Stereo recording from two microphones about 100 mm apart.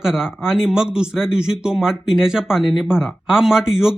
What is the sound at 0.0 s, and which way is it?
Speech, 5° right (ahead or behind).